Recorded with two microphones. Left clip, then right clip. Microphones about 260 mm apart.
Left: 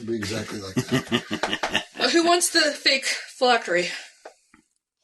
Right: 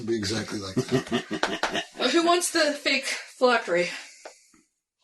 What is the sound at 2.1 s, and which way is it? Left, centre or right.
Speech, left.